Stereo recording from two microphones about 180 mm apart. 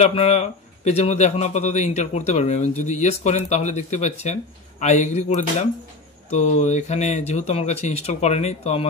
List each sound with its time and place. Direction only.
0.0 s a man's voice: 35° left (ahead or behind)